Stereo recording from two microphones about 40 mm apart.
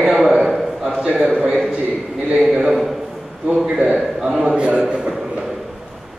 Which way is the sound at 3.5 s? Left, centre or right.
Centre.